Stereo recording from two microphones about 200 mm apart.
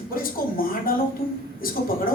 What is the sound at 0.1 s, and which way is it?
Speech, 45° left (ahead or behind).